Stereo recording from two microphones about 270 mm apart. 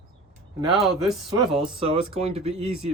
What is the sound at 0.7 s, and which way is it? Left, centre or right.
Speech, centre.